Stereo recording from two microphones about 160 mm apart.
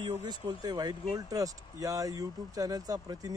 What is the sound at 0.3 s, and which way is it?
Speech, 25° right (ahead or behind).